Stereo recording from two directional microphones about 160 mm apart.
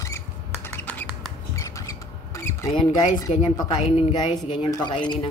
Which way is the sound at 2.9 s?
20° left (ahead or behind).